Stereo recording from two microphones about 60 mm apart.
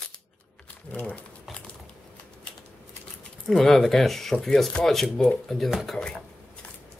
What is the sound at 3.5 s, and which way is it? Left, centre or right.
Speech, centre.